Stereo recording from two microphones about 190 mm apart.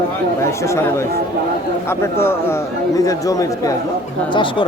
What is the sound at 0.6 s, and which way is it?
A man's voice, 15° left (ahead or behind).